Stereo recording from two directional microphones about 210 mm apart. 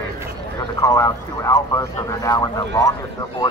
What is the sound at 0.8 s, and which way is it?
Speech, 15° left (ahead or behind).